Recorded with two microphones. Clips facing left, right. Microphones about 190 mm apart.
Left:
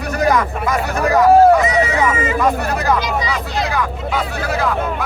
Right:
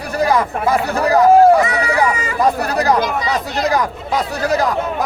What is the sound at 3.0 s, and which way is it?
Speech, 50° right (ahead or behind).